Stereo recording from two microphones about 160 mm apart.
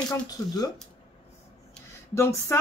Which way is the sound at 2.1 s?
15° left (ahead or behind).